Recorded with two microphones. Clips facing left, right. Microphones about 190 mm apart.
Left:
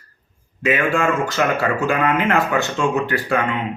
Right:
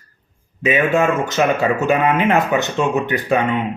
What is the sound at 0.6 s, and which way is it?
Speech, 20° right (ahead or behind).